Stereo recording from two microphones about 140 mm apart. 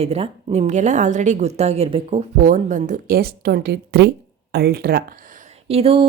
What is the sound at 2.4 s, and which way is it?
A woman's voice, 70° right (ahead or behind).